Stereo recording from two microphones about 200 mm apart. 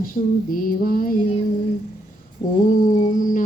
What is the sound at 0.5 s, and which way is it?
Speech, 45° left (ahead or behind).